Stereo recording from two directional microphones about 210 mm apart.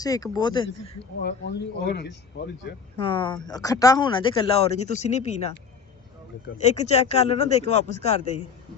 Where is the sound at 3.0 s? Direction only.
25° left (ahead or behind).